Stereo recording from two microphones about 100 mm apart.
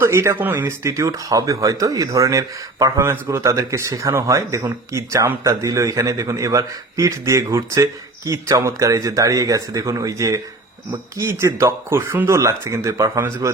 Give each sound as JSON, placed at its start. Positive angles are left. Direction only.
{"t": 0.0, "sound": "a man's voice", "side_deg": -30}